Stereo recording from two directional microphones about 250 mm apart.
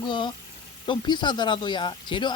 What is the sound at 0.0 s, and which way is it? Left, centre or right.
Speech, centre.